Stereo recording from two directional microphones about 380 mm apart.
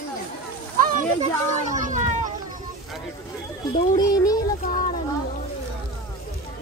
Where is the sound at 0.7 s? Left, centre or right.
Right.